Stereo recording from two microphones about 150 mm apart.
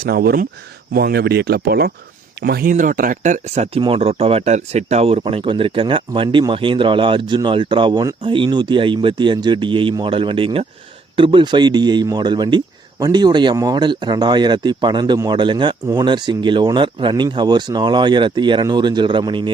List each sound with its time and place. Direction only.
0.0 s speech: 90° right; by 19.5 s 30° right (ahead or behind)